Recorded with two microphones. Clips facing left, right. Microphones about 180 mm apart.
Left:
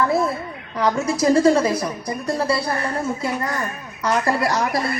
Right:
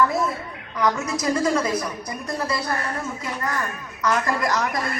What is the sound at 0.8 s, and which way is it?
A woman's voice, 30° left (ahead or behind).